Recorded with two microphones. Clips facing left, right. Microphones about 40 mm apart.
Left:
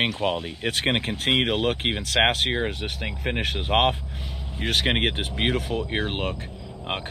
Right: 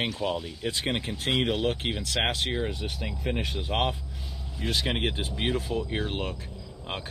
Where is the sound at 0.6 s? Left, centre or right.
Left.